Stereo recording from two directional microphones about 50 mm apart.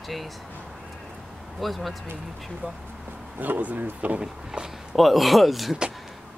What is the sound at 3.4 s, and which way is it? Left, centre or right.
Speech, right.